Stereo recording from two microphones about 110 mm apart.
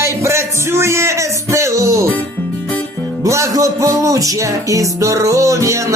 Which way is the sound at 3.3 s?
25° right (ahead or behind).